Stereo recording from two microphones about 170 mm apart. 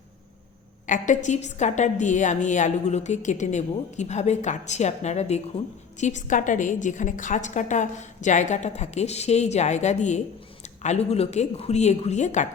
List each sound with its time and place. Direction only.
0.9 s a woman's voice: 50° left (ahead or behind)